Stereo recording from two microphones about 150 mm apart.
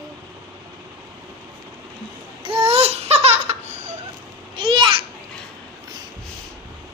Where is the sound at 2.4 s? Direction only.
40° right (ahead or behind).